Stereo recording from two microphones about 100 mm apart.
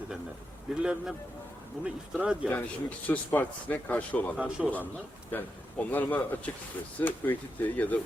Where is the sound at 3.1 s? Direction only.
15° left (ahead or behind).